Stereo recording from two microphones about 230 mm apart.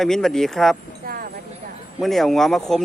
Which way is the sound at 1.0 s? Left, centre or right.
Right.